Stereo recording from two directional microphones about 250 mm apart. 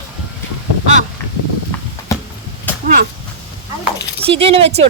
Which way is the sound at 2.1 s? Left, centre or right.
Centre.